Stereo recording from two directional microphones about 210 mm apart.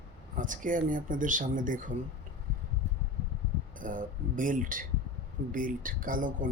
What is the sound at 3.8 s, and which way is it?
Speech, 40° right (ahead or behind).